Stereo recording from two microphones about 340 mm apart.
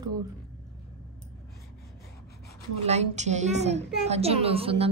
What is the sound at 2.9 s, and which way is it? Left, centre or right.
A child's voice, centre.